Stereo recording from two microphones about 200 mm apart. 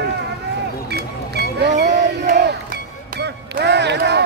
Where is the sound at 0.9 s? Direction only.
55° right (ahead or behind).